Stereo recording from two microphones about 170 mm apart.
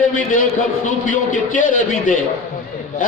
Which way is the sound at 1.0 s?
50° left (ahead or behind).